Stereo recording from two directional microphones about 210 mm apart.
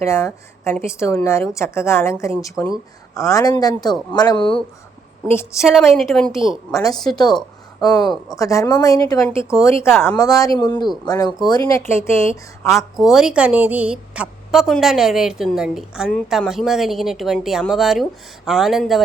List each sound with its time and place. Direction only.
0.0 s speech: 10° left (ahead or behind)
5.5 s a woman's voice: centre (ahead or behind)
6.7 s speech: 15° left (ahead or behind)
7.3 s a sound: centre (ahead or behind)
8.0 s a woman's voice: centre (ahead or behind)
8.4 s speech: 15° left (ahead or behind)
12.6 s a woman's voice: centre (ahead or behind)